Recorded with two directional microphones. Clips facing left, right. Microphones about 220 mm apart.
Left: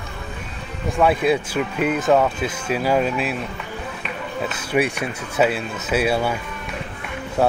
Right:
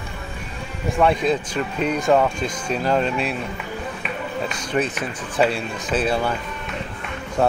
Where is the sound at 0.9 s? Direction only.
5° left (ahead or behind).